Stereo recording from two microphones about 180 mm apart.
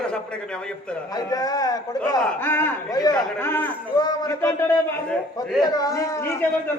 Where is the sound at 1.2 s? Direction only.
20° left (ahead or behind).